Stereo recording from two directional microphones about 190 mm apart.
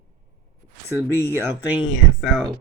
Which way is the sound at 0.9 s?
15° right (ahead or behind).